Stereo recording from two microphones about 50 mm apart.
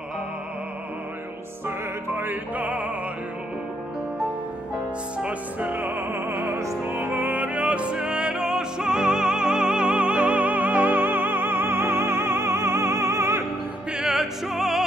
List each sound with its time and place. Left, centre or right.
2.1 s music: right
5.2 s opera: right
6.9 s music: right
13.9 s opera: centre